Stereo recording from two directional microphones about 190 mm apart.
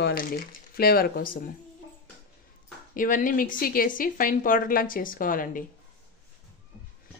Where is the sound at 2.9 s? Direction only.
45° left (ahead or behind).